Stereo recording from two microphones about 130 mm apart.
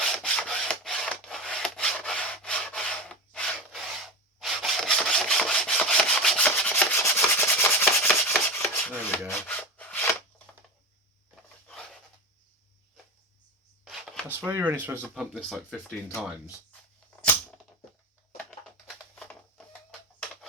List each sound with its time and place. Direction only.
0.0 s wood: 5° left (ahead or behind)
8.3 s rub: 15° left (ahead or behind)
9.2 s a sound: 10° left (ahead or behind)
13.8 s chopping: centre (ahead or behind)
14.3 s speech: 15° right (ahead or behind)
15.1 s speech: centre (ahead or behind)
18.6 s a sound: centre (ahead or behind)